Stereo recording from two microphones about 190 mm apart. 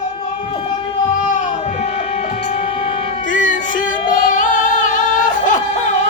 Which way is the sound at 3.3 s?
45° left (ahead or behind).